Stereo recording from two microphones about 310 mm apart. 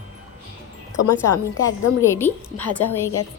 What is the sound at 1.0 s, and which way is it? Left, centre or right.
Speech, left.